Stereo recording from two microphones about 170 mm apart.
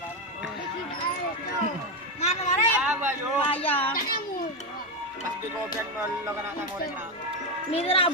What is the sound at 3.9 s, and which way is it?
Speech, 60° left (ahead or behind).